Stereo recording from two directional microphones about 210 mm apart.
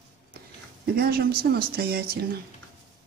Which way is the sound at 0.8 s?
45° right (ahead or behind).